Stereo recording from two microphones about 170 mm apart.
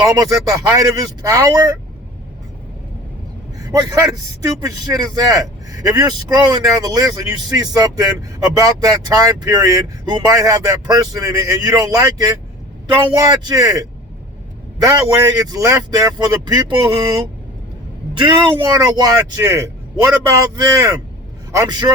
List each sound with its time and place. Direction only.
0.1 s a man's voice: 20° right (ahead or behind)
3.6 s a man's voice: 20° right (ahead or behind)